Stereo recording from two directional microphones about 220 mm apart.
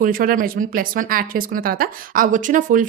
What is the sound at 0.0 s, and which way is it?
A woman's voice, 40° right (ahead or behind).